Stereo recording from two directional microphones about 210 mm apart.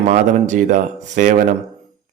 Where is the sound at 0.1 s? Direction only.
35° right (ahead or behind).